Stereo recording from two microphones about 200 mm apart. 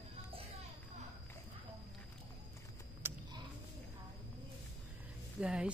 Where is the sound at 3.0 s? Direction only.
10° right (ahead or behind).